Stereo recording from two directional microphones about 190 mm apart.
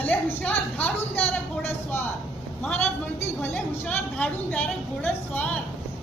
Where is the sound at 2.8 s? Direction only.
15° left (ahead or behind).